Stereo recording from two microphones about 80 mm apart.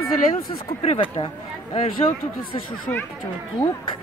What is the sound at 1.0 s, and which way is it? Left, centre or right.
Speech, left.